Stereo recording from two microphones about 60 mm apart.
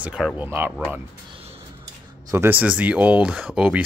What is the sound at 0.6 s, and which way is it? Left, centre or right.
Speech, right.